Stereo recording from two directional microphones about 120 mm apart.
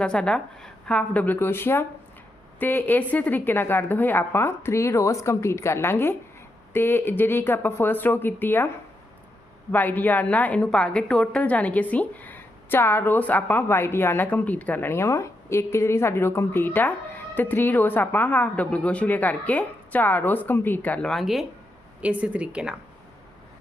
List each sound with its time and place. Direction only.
0.0 s a woman's voice: 5° left (ahead or behind)
9.7 s a woman's voice: 15° left (ahead or behind)
22.0 s a woman's voice: 10° right (ahead or behind)